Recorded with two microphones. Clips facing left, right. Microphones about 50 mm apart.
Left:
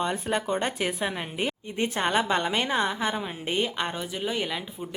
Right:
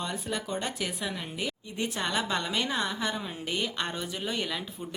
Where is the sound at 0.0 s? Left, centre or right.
Left.